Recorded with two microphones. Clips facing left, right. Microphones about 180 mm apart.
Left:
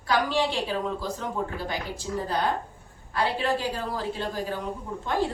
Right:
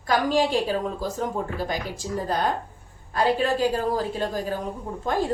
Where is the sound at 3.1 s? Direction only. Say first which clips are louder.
Right 4 dB; 45° right (ahead or behind).